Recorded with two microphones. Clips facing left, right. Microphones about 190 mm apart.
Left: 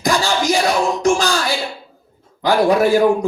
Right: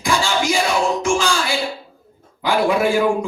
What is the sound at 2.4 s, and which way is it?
Speech, 40° left (ahead or behind).